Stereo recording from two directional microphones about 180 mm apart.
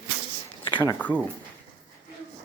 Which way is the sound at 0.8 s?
10° left (ahead or behind).